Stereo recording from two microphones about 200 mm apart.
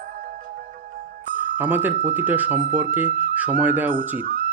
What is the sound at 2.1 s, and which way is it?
Speech, 10° right (ahead or behind).